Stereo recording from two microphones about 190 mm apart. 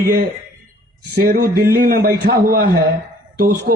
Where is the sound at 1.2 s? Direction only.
55° right (ahead or behind).